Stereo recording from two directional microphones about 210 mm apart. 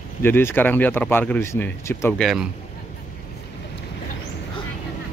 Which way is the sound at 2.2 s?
Centre (ahead or behind).